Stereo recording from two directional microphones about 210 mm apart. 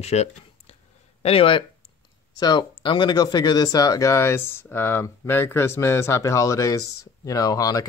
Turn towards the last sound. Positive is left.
turn(degrees=15)  # may be behind; listen again after turning